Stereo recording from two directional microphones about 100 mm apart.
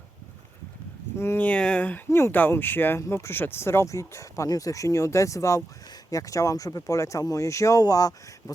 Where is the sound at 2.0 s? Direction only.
25° left (ahead or behind).